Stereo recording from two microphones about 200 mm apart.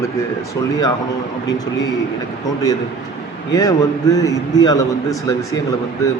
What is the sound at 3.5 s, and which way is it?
A man's voice, 15° left (ahead or behind).